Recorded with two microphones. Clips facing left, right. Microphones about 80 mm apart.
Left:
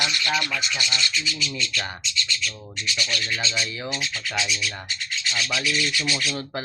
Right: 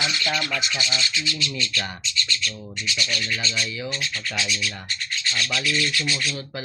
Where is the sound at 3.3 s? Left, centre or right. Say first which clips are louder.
Even; centre.